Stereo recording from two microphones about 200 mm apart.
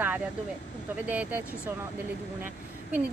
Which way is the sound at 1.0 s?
5° right (ahead or behind).